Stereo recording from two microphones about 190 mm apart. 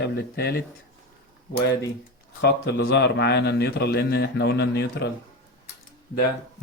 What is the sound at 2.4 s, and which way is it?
A man's voice, 60° left (ahead or behind).